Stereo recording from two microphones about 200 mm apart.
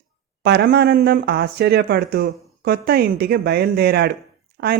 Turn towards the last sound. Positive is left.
turn(degrees=-60)  # may be behind; listen again after turning